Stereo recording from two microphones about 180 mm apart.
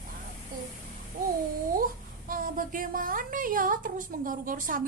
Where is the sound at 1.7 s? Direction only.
50° right (ahead or behind).